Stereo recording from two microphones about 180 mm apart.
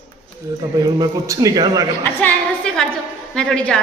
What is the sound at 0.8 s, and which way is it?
A man's voice, 20° right (ahead or behind).